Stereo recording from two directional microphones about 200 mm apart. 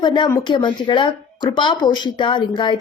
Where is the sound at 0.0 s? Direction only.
20° left (ahead or behind).